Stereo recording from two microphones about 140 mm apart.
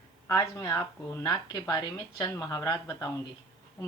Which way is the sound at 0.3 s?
20° left (ahead or behind).